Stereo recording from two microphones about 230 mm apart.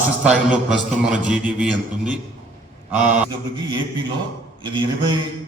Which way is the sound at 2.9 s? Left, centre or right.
Right.